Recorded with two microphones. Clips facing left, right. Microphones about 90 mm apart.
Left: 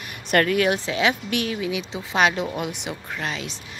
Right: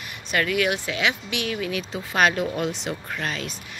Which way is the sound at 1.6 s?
20° left (ahead or behind).